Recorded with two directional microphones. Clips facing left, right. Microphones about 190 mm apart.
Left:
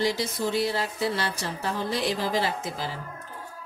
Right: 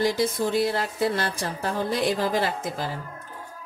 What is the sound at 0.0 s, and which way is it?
A woman's voice, 50° right (ahead or behind).